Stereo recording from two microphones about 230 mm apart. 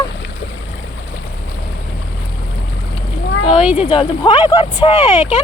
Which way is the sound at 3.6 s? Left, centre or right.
Centre.